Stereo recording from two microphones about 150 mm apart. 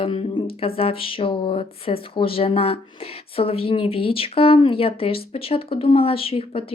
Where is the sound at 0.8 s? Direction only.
40° left (ahead or behind).